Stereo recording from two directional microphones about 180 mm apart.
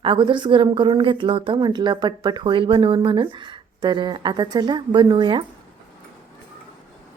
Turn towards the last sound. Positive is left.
turn(degrees=-25)  # may be behind; listen again after turning